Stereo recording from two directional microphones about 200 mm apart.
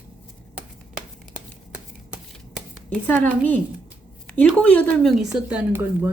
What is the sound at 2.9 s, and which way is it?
A woman's voice, 5° left (ahead or behind).